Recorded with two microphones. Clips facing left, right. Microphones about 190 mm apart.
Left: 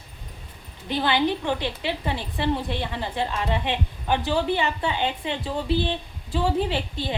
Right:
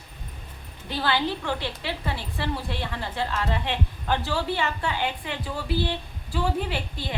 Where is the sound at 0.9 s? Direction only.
20° left (ahead or behind).